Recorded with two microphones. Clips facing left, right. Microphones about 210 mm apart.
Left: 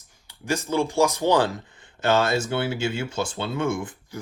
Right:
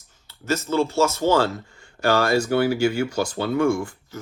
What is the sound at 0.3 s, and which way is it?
Speech, 15° left (ahead or behind).